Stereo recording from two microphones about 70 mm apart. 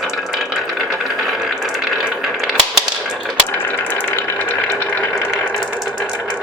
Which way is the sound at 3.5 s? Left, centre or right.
Left.